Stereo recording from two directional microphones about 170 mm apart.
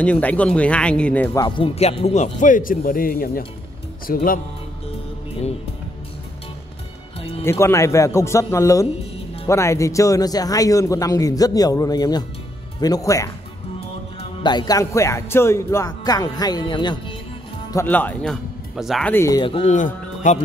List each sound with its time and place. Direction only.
0.0 s speech: 10° left (ahead or behind)
1.4 s speech: 35° left (ahead or behind); by 4.4 s 55° left (ahead or behind)
7.2 s music: 35° left (ahead or behind)
7.4 s a man's voice: 15° left (ahead or behind)
14.4 s a man's voice: 25° left (ahead or behind)
17.7 s speech: 10° left (ahead or behind)
19.1 s a man's voice: 20° left (ahead or behind)
19.4 s speech: 30° left (ahead or behind)
19.7 s speech: 45° left (ahead or behind)